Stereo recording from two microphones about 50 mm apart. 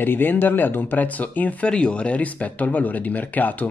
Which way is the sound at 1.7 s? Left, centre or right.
Left.